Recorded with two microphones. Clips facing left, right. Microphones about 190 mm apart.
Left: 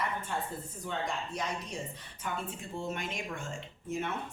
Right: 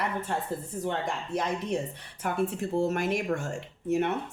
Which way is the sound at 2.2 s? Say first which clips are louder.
Right 10 dB; 70° right (ahead or behind).